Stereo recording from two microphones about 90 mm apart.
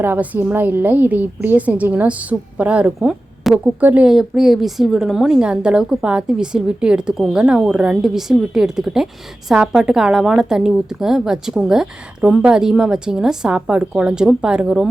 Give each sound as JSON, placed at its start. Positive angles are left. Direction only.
{"t": 0.0, "sound": "a woman's voice", "side_deg": -25}
{"t": 4.1, "sound": "a woman's voice", "side_deg": -5}